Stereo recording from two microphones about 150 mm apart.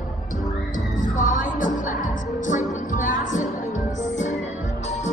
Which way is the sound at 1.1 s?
60° left (ahead or behind).